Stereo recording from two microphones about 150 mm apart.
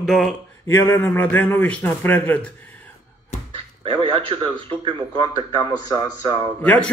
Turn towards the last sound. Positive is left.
turn(degrees=10)  # may be behind; listen again after turning